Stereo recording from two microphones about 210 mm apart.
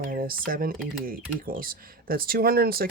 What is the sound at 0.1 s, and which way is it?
Speech, 45° right (ahead or behind).